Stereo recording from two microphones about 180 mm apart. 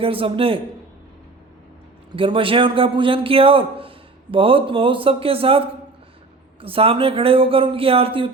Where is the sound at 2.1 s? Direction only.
30° right (ahead or behind).